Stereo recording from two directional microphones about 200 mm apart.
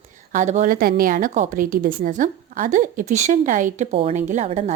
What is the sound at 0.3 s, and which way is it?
A woman's voice, 35° right (ahead or behind).